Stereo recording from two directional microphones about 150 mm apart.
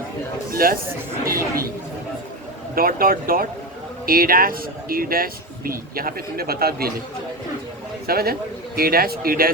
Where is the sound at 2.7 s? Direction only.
75° right (ahead or behind); by 6.9 s 90° right.